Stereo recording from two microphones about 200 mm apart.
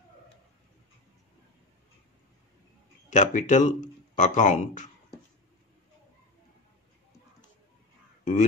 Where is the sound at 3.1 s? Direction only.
35° left (ahead or behind).